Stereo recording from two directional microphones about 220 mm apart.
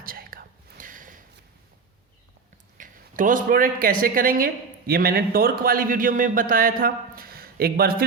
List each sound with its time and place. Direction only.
0.0 s whispering: 40° right (ahead or behind)
2.7 s speech: 35° right (ahead or behind)